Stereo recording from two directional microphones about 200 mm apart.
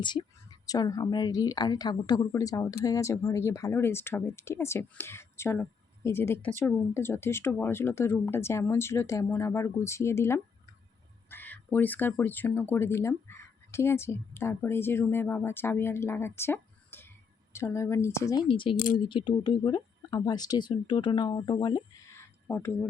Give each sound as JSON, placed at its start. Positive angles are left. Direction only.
{"t": 0.0, "sound": "speech", "side_deg": 20}